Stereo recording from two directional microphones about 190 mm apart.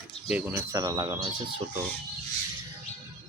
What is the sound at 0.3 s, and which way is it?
Speech, 10° right (ahead or behind).